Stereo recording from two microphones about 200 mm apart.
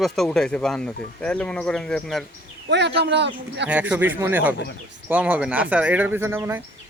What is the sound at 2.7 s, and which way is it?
Speech, 60° right (ahead or behind).